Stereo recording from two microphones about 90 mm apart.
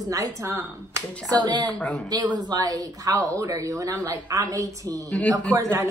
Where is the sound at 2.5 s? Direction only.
45° right (ahead or behind).